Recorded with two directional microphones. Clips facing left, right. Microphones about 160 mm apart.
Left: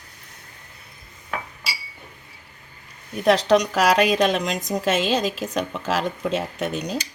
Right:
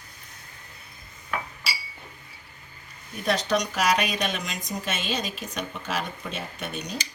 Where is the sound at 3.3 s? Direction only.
90° left.